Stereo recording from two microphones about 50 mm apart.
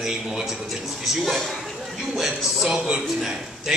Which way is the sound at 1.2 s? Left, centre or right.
Centre.